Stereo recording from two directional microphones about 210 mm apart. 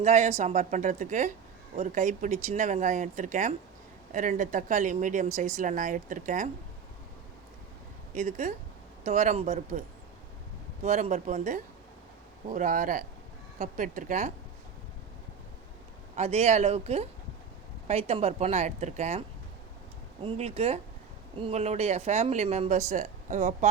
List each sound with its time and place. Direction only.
0.0 s speech: 30° right (ahead or behind)
8.1 s speech: 35° right (ahead or behind)
10.8 s speech: 35° right (ahead or behind)
16.1 s speech: 30° right (ahead or behind)
20.2 s speech: 30° right (ahead or behind)